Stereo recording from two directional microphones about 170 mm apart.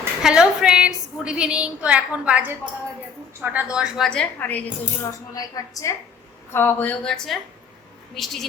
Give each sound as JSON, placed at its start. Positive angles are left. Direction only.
{"t": 0.2, "sound": "a woman's voice", "side_deg": -5}
{"t": 5.3, "sound": "a woman's voice", "side_deg": 20}